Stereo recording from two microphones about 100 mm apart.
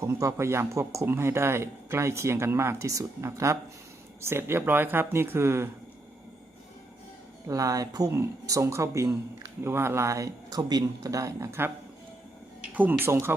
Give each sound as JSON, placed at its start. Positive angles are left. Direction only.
{"t": 0.0, "sound": "speech", "side_deg": -30}
{"t": 7.4, "sound": "speech", "side_deg": -35}
{"t": 12.7, "sound": "speech", "side_deg": -20}